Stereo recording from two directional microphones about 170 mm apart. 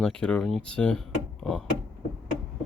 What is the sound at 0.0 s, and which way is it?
Speech, 5° left (ahead or behind).